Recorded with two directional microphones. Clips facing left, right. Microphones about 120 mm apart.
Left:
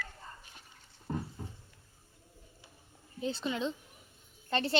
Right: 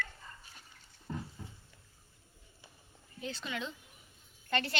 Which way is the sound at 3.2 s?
30° left (ahead or behind).